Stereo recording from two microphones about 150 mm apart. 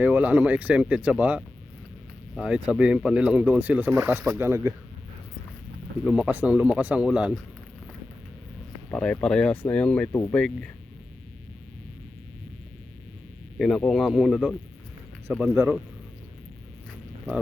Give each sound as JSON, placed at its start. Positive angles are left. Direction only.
{"t": 0.0, "sound": "speech", "side_deg": -10}
{"t": 6.1, "sound": "speech", "side_deg": -10}
{"t": 8.9, "sound": "speech", "side_deg": 5}
{"t": 13.6, "sound": "speech", "side_deg": 0}
{"t": 15.3, "sound": "speech", "side_deg": -10}